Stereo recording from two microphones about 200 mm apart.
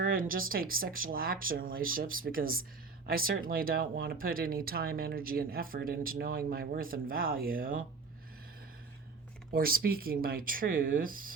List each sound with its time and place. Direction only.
0.0 s speech: 45° right (ahead or behind)
9.5 s speech: 45° right (ahead or behind)